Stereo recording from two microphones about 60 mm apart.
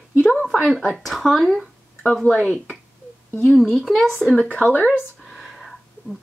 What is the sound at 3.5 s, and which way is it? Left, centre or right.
Speech, centre.